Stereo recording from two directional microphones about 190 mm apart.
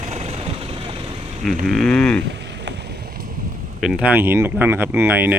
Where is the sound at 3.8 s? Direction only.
5° right (ahead or behind).